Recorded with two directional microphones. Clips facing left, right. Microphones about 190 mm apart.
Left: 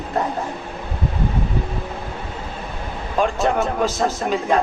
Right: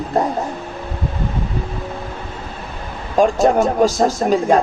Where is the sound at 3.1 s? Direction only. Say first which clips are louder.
Right 6 dB; 40° right (ahead or behind).